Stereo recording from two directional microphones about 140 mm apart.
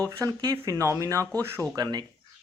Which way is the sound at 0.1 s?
20° right (ahead or behind).